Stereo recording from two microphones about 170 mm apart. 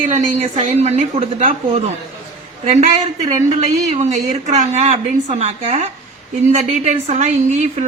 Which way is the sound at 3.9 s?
45° right (ahead or behind).